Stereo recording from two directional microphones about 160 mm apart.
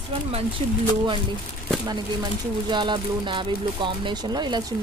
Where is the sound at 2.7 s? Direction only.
30° right (ahead or behind).